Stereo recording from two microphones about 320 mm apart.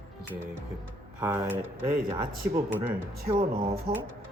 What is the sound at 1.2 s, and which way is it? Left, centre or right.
Speech, centre.